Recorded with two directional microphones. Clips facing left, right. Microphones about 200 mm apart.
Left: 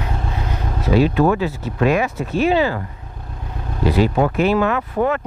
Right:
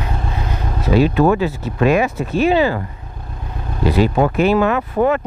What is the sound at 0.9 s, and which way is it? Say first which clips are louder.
Speech: right 2 dB; 10° right (ahead or behind).